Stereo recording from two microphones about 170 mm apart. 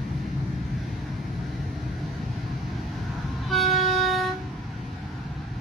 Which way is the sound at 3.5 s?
Centre (ahead or behind).